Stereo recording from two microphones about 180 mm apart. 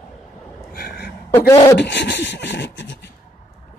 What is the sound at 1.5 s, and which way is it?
Speech, 20° left (ahead or behind).